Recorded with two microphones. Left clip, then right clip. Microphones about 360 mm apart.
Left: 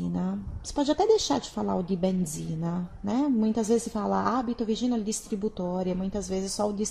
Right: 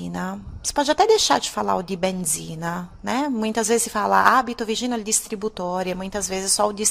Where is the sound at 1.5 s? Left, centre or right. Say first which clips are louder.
Right 7 dB; right.